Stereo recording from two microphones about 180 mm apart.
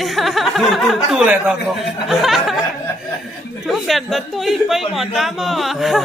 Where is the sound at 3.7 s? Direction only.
Centre (ahead or behind).